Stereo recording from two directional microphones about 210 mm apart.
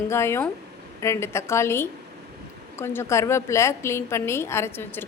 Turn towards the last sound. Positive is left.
turn(degrees=10)  # may be behind; listen again after turning